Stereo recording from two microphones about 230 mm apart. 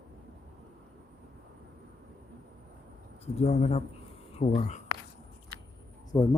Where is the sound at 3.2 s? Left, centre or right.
Left.